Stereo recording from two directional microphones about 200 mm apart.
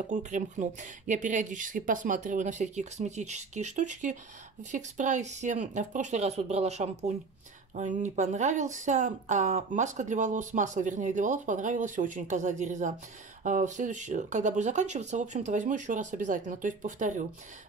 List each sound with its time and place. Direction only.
0.1 s speech: 35° right (ahead or behind)